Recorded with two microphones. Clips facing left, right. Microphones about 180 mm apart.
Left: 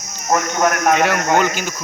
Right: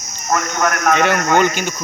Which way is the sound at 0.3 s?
20° left (ahead or behind).